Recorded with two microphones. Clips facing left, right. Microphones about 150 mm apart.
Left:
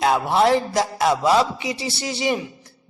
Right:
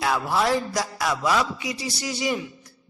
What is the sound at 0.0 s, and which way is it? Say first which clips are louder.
A woman's voice: left 5 dB; 25° left (ahead or behind).